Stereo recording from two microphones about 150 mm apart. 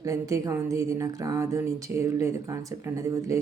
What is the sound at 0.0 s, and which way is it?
A woman's voice, 20° right (ahead or behind).